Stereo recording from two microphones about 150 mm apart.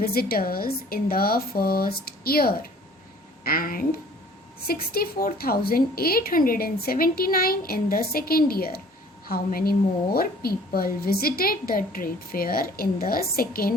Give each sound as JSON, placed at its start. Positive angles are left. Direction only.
{"t": 0.0, "sound": "a woman's voice", "side_deg": 90}
{"t": 3.4, "sound": "speech", "side_deg": 75}
{"t": 4.6, "sound": "a woman's voice", "side_deg": 90}